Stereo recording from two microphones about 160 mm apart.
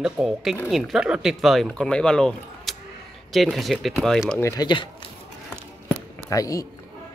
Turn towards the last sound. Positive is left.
turn(degrees=20)  # may be behind; listen again after turning